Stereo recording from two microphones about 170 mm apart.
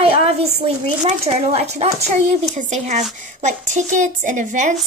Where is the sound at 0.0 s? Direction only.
35° right (ahead or behind).